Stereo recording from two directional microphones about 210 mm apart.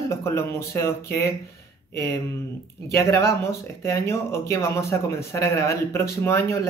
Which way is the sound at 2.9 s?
15° left (ahead or behind).